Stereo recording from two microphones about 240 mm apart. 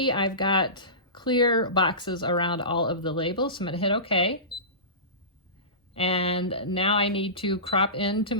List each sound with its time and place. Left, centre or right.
0.0 s speech: centre
5.9 s speech: left